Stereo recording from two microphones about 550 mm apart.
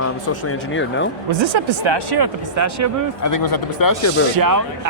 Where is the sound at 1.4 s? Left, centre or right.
Right.